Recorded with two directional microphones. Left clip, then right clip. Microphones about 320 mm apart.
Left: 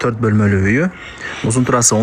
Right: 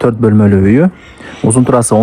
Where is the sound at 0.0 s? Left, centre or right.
Centre.